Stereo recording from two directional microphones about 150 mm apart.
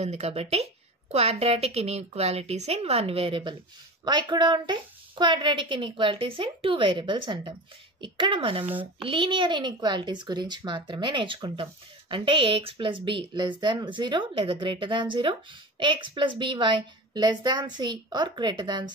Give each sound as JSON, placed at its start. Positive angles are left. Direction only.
{"t": 0.0, "sound": "a woman's voice", "side_deg": -45}